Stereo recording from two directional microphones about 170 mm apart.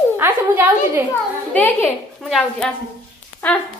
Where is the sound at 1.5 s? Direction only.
10° left (ahead or behind).